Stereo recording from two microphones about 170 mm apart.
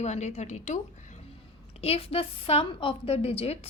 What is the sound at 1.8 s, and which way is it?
A woman's voice, 35° left (ahead or behind).